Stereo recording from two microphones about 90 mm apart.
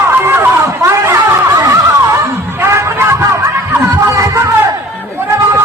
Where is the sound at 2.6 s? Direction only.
30° right (ahead or behind).